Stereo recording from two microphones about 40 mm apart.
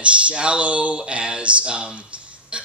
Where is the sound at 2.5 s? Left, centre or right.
Right.